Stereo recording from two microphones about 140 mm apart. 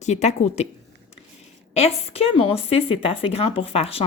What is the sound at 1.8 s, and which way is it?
A woman's voice, 45° left (ahead or behind).